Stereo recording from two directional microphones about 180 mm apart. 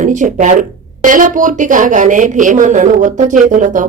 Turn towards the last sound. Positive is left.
turn(degrees=-45)  # may be behind; listen again after turning